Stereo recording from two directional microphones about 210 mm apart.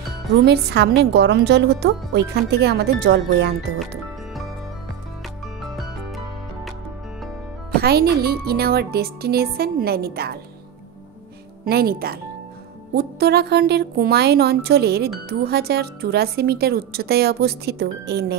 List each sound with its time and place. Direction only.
0.5 s a woman's voice: 50° right (ahead or behind)
7.8 s a woman's voice: 50° right (ahead or behind)
11.6 s a woman's voice: 45° right (ahead or behind)